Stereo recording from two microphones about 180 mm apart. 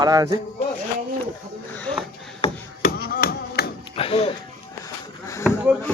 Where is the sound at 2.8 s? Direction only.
55° left (ahead or behind).